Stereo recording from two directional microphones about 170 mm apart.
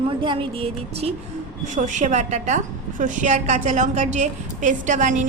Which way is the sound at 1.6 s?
45° right (ahead or behind).